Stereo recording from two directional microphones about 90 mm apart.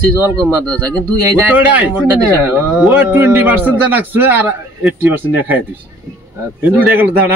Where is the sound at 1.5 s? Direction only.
20° right (ahead or behind).